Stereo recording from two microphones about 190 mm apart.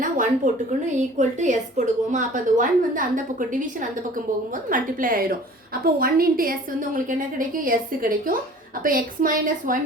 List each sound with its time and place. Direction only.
0.0 s a sound: 45° right (ahead or behind)
0.9 s a woman's voice: 40° right (ahead or behind)
8.8 s a woman's voice: 45° right (ahead or behind)